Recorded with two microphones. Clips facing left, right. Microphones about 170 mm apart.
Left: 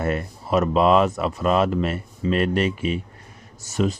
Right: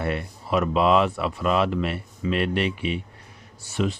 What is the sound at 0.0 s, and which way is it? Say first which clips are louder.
Speech: left 3 dB; 45° left (ahead or behind).